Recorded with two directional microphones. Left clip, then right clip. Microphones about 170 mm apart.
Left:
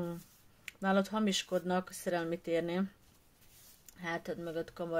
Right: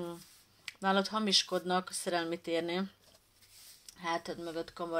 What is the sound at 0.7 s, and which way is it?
Speech, 45° left (ahead or behind).